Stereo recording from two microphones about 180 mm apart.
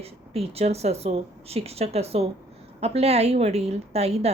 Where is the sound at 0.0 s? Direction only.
35° right (ahead or behind).